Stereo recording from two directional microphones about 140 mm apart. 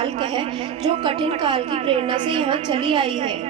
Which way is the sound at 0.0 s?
35° right (ahead or behind).